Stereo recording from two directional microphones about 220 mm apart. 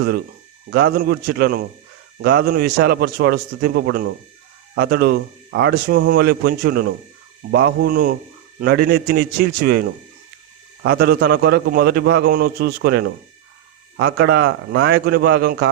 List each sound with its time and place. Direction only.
0.7 s a man's voice: 45° right (ahead or behind)